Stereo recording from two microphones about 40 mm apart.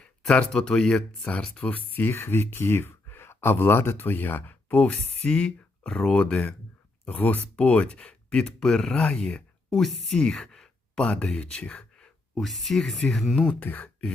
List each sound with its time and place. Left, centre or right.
0.0 s speech: left
1.7 s speech: left
2.0 s speech: left
4.9 s speech: left
7.2 s speech: left
7.5 s speech: left
8.6 s speech: centre
11.8 s a sound: centre
12.4 s speech: centre